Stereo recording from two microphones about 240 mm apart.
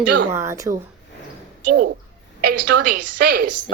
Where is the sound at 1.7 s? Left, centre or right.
Right.